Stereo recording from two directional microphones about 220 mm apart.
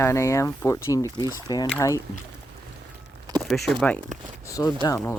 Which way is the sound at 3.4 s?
Centre (ahead or behind).